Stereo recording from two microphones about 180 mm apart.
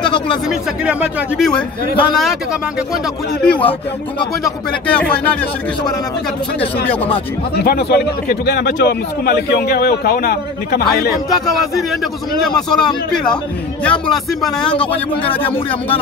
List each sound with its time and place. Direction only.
1.4 s speech: 5° left (ahead or behind)
3.4 s speech: 5° left (ahead or behind)
4.8 s speech: 5° left (ahead or behind)
7.6 s a man's voice: 60° left (ahead or behind)
11.2 s speech: centre (ahead or behind)